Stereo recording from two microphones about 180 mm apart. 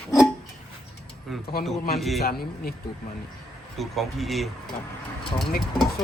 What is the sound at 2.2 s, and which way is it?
Speech, 60° left (ahead or behind).